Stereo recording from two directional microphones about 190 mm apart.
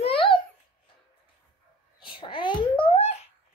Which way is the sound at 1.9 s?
25° left (ahead or behind).